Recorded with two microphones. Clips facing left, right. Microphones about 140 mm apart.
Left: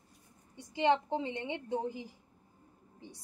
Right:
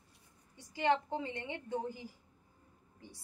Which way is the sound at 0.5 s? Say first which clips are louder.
Left 3 dB; 20° left (ahead or behind).